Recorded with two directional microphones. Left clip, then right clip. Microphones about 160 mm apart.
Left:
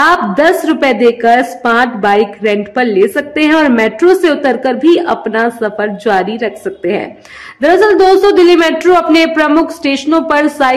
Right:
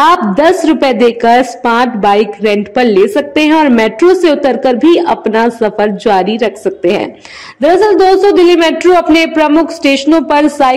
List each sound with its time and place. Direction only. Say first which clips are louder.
0.0 s a woman's voice: right 1 dB; 20° right (ahead or behind)
7.6 s a man's voice: even; 10° right (ahead or behind)